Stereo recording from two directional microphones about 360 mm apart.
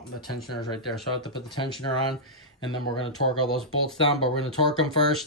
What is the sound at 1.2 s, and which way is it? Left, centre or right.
Speech, centre.